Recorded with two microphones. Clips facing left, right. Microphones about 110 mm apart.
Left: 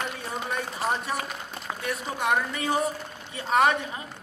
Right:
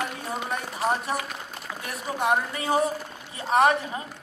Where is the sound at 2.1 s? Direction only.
30° right (ahead or behind).